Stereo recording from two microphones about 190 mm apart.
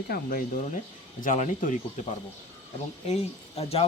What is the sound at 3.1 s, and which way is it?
Speech, 35° left (ahead or behind).